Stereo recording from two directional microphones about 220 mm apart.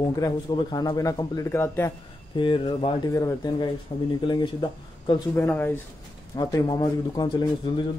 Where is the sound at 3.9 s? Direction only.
30° left (ahead or behind).